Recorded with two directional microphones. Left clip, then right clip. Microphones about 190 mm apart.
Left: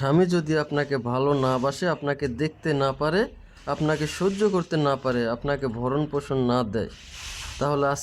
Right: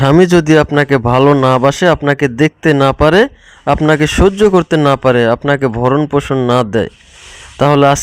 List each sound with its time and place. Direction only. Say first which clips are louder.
0.0 s speech: right 14 dB; 40° right (ahead or behind)
6.3 s speech: right 10 dB; 30° right (ahead or behind)
6.6 s speech: right 13 dB; 40° right (ahead or behind)